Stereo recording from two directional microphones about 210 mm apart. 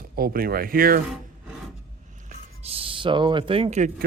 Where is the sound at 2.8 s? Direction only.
25° right (ahead or behind).